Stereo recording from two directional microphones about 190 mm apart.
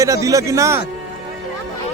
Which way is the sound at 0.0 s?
15° right (ahead or behind).